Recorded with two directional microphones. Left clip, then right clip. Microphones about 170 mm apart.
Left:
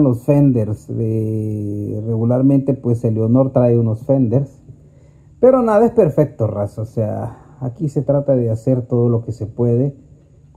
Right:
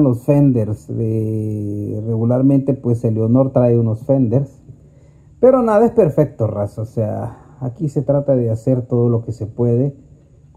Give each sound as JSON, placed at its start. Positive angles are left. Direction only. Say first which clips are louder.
{"t": 0.0, "sound": "speech", "louder": "even", "side_deg": 0}